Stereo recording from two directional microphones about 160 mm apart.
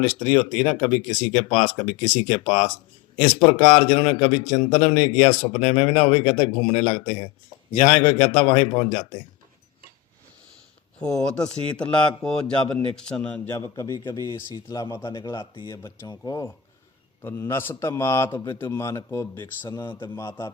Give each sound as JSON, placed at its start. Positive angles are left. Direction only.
{"t": 0.0, "sound": "a man's voice", "side_deg": 30}
{"t": 11.2, "sound": "a man's voice", "side_deg": 5}
{"t": 13.6, "sound": "speech", "side_deg": 20}
{"t": 15.1, "sound": "a man's voice", "side_deg": 30}